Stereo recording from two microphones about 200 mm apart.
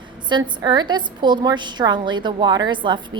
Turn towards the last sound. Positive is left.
turn(degrees=-25)  # may be behind; listen again after turning